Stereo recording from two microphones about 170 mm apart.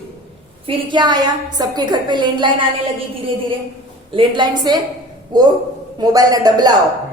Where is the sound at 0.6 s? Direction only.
25° right (ahead or behind).